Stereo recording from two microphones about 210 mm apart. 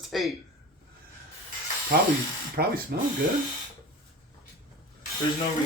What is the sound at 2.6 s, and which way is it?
Speech, 50° right (ahead or behind).